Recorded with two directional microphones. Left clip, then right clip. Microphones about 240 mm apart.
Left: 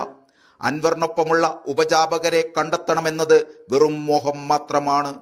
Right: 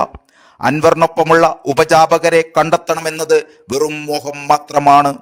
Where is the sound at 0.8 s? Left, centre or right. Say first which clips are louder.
Right 10 dB; right.